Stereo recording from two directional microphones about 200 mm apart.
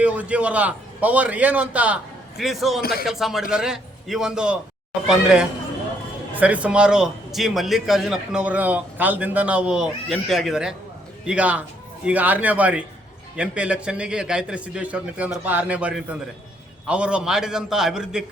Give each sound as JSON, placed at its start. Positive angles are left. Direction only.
{"t": 0.0, "sound": "a man's voice", "side_deg": -5}
{"t": 2.8, "sound": "speech", "side_deg": 50}
{"t": 3.1, "sound": "a man's voice", "side_deg": 0}